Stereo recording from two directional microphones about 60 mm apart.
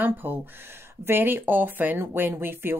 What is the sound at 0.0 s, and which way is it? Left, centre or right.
Speech, right.